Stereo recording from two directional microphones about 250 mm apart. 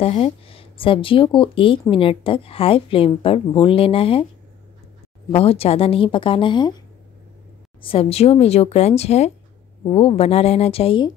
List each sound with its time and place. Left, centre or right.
0.0 s speech: left
5.3 s speech: left
7.8 s speech: left